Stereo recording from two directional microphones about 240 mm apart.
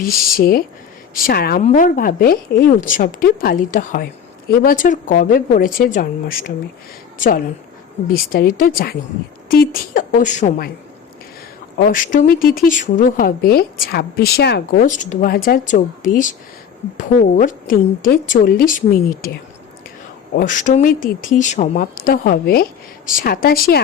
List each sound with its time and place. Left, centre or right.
0.0 s speech: left
11.8 s speech: left